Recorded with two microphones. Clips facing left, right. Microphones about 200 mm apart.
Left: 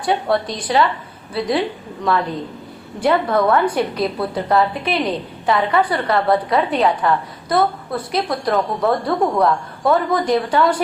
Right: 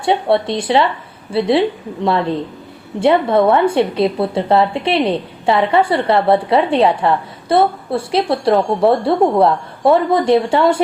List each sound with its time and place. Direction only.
0.0 s a woman's voice: 25° right (ahead or behind)